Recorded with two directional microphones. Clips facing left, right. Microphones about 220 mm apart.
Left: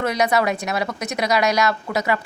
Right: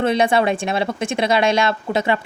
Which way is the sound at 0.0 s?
30° right (ahead or behind).